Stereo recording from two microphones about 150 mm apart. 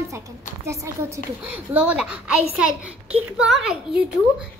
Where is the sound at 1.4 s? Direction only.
10° right (ahead or behind).